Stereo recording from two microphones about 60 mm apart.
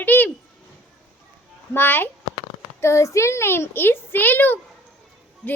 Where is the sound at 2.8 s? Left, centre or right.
Left.